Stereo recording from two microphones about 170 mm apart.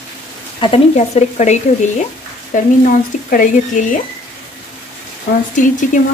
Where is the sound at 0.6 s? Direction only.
35° left (ahead or behind); by 4.0 s 55° left (ahead or behind).